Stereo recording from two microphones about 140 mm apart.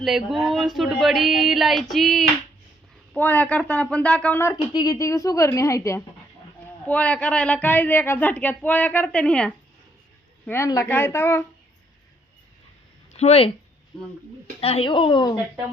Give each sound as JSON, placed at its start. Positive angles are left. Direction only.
{"t": 0.0, "sound": "a sound", "side_deg": 0}
{"t": 3.2, "sound": "a woman's voice", "side_deg": 10}
{"t": 4.5, "sound": "a woman's voice", "side_deg": 30}
{"t": 6.8, "sound": "a woman's voice", "side_deg": 10}
{"t": 13.1, "sound": "speech", "side_deg": 50}
{"t": 14.6, "sound": "speech", "side_deg": 45}